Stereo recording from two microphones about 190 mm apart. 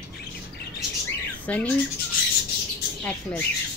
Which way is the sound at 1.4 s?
5° left (ahead or behind).